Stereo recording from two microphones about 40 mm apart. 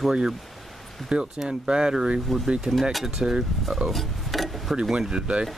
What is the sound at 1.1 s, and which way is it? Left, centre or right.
Speech, right.